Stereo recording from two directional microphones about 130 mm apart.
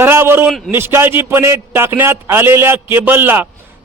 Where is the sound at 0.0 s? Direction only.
20° right (ahead or behind).